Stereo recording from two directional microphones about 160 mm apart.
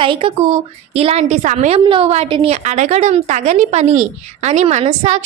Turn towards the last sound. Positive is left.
turn(degrees=-45)  # may be behind; listen again after turning